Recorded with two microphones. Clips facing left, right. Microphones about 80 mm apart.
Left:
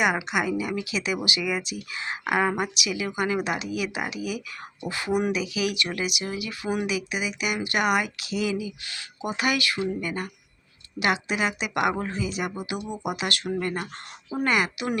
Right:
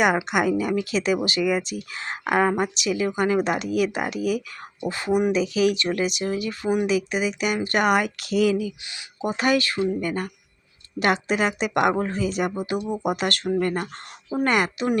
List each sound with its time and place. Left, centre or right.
0.3 s speech: right
2.2 s a woman's voice: centre
2.7 s speech: right
4.8 s speech: right
5.3 s speech: right
8.9 s speech: right